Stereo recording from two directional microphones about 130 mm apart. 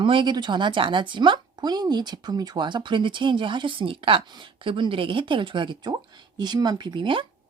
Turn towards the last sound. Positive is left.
turn(degrees=-40)  # may be behind; listen again after turning